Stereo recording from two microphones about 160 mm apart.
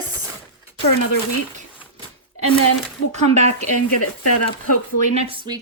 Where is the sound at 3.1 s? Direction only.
45° right (ahead or behind).